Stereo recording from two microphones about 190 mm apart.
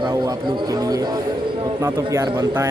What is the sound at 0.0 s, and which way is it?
Speech, 20° right (ahead or behind).